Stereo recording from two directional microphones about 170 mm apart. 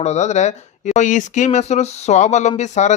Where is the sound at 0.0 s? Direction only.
40° left (ahead or behind).